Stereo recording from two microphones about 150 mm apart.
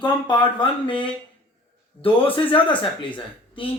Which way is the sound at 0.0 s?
30° left (ahead or behind).